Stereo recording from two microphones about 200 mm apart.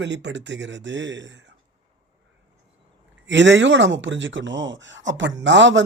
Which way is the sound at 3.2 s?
65° right (ahead or behind).